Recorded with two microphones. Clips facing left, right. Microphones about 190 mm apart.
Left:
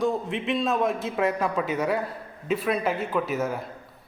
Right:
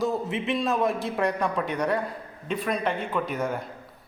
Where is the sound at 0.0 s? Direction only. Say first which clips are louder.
Left 1 dB; centre (ahead or behind).